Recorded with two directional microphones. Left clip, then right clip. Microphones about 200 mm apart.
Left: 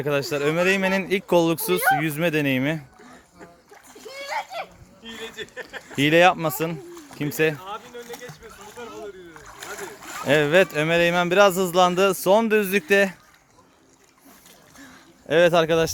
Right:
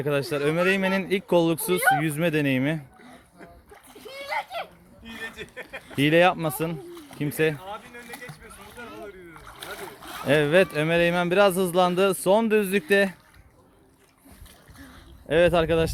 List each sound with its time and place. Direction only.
0.0 s speech: centre (ahead or behind)
3.9 s splash: 5° left (ahead or behind)
5.4 s a sound: 20° right (ahead or behind)
5.9 s speech: 5° left (ahead or behind)
9.4 s boat: 10° left (ahead or behind)
10.2 s speech: centre (ahead or behind)
15.3 s speech: 10° left (ahead or behind)